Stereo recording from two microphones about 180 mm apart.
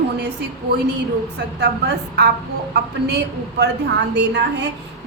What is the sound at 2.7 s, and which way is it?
A woman's voice, 65° right (ahead or behind).